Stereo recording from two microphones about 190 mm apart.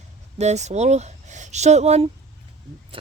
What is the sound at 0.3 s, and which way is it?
Speech, 35° right (ahead or behind).